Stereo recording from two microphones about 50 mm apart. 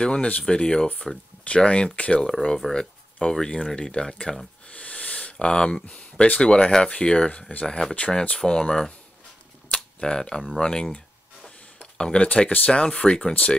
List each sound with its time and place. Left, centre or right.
0.0 s speech: left
4.6 s a sound: left
6.7 s speech: centre
9.9 s speech: centre